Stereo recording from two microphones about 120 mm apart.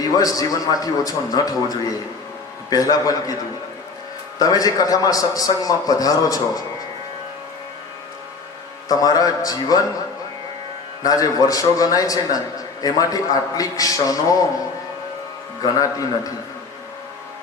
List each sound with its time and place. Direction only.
0.0 s a man's voice: 30° left (ahead or behind)
2.6 s a man's voice: 30° left (ahead or behind)
4.4 s a man's voice: 30° left (ahead or behind)
8.9 s a man's voice: 30° left (ahead or behind)
11.0 s a man's voice: 30° left (ahead or behind)
15.6 s a man's voice: 30° left (ahead or behind)